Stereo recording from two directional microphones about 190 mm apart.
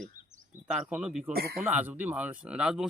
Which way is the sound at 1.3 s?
55° right (ahead or behind).